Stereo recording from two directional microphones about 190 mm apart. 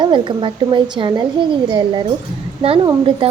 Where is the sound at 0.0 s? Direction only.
25° right (ahead or behind).